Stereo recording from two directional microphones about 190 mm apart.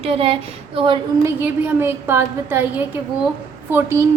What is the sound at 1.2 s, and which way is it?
A woman's voice, 10° right (ahead or behind).